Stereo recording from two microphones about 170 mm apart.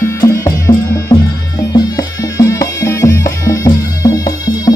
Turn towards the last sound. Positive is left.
turn(degrees=20)  # may be behind; listen again after turning